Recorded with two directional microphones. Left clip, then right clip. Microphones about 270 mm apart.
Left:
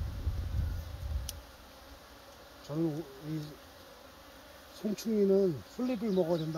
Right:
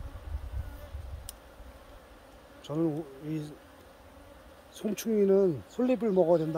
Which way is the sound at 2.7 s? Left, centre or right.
Centre.